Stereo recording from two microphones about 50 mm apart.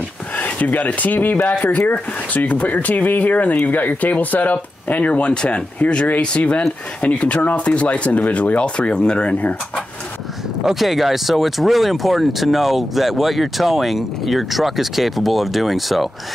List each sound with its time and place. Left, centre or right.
0.4 s speech: left
5.3 s speech: centre
10.6 s speech: centre